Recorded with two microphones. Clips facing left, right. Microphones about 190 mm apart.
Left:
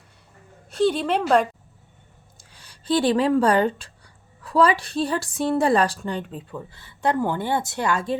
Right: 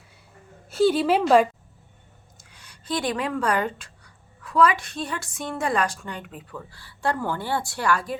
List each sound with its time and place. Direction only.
0.7 s a woman's voice: 5° right (ahead or behind)
2.4 s speech: 30° left (ahead or behind)